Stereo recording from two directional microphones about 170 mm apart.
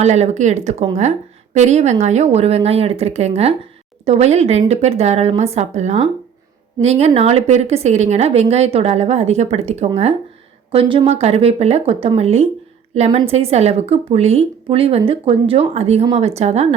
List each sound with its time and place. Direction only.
0.0 s a woman's voice: 40° right (ahead or behind)